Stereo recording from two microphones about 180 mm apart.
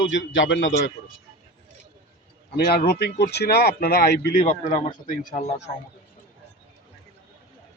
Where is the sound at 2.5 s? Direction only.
60° left (ahead or behind).